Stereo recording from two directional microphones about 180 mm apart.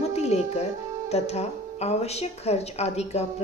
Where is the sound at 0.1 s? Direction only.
35° left (ahead or behind).